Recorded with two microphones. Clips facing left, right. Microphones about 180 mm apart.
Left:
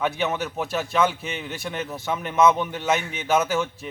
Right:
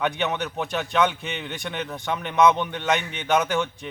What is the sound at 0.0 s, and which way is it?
A man's voice, 5° left (ahead or behind).